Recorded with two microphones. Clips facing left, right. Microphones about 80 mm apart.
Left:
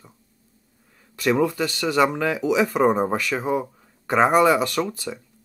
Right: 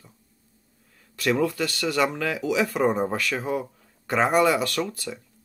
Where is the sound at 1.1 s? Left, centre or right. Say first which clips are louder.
Left 3 dB; centre.